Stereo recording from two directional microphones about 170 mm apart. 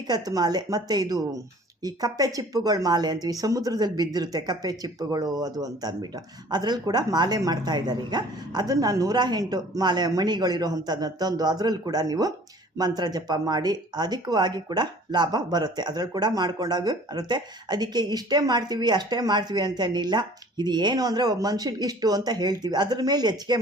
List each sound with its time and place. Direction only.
0.1 s speech: 25° right (ahead or behind)